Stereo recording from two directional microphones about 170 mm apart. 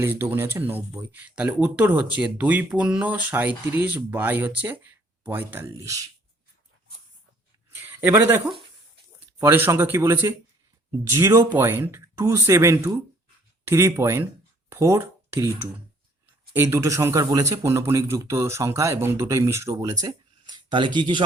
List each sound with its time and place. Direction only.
0.0 s speech: 10° right (ahead or behind)
7.8 s a sound: 10° right (ahead or behind)
9.4 s speech: 15° right (ahead or behind)